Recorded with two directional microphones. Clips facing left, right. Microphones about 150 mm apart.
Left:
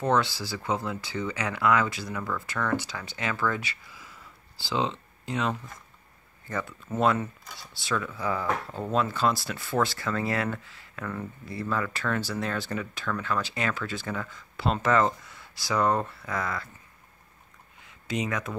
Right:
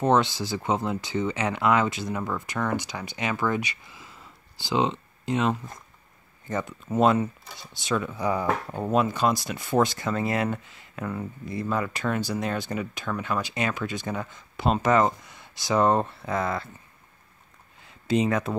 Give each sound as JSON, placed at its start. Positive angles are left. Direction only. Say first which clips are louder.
{"t": 0.0, "sound": "speech", "louder": "right 3 dB", "side_deg": -20}
{"t": 17.8, "sound": "speech", "louder": "right 7 dB", "side_deg": -30}